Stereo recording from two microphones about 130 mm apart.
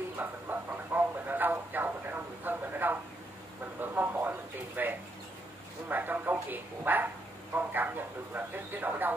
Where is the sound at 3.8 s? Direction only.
15° right (ahead or behind).